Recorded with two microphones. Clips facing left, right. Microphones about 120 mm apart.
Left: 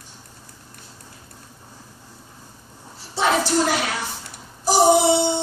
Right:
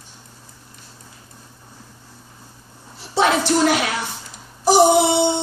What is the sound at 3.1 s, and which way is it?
Child singing, 70° right (ahead or behind).